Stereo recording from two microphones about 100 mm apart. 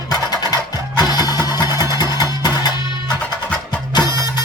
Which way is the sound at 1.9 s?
45° left (ahead or behind).